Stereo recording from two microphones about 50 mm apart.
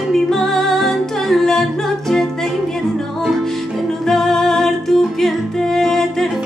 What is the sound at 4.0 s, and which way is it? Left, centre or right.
Music, centre.